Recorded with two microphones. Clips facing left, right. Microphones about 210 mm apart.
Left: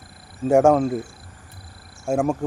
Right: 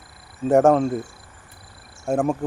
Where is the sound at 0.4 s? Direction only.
Centre (ahead or behind).